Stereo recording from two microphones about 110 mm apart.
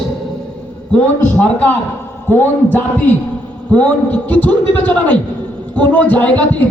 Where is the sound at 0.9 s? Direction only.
5° left (ahead or behind).